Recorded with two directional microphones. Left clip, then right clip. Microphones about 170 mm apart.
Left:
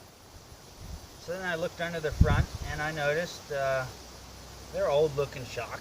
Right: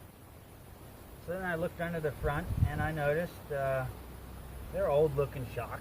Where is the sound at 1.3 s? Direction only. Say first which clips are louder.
Left 3 dB; centre (ahead or behind).